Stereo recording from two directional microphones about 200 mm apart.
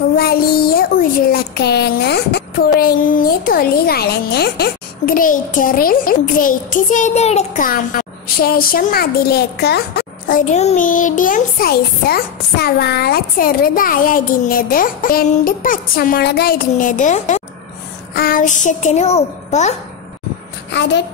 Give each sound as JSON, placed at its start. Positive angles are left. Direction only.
{"t": 0.2, "sound": "a child's voice", "side_deg": 50}
{"t": 20.7, "sound": "a child's voice", "side_deg": 60}